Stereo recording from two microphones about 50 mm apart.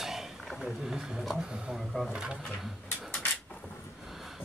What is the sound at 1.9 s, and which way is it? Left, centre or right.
Speech, centre.